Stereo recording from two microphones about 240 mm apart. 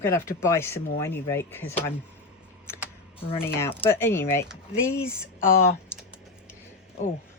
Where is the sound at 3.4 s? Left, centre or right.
Centre.